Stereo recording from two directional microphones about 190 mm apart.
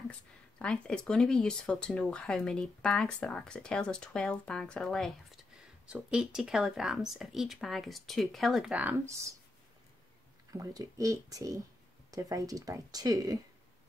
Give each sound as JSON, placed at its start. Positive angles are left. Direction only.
{"t": 0.6, "sound": "speech", "side_deg": 5}
{"t": 10.6, "sound": "speech", "side_deg": -20}